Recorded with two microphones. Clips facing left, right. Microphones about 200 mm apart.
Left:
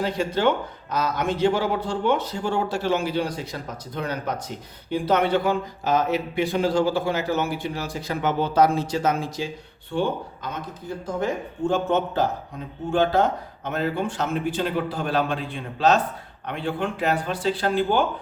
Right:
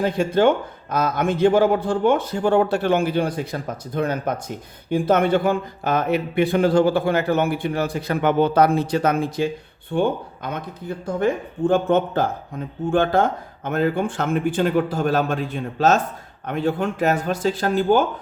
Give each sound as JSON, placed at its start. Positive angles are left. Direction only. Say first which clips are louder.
{"t": 0.0, "sound": "a man's voice", "louder": "right 5 dB", "side_deg": -50}